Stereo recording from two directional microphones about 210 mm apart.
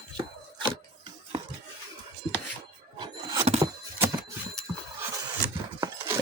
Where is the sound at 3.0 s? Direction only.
25° right (ahead or behind).